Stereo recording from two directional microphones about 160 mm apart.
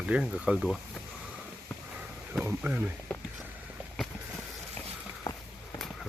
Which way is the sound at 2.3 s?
10° right (ahead or behind).